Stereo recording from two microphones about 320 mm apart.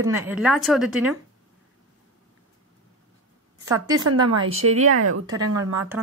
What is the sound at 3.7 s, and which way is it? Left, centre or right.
Speech, centre.